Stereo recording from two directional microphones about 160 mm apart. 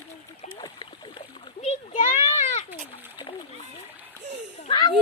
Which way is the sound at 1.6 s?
45° left (ahead or behind).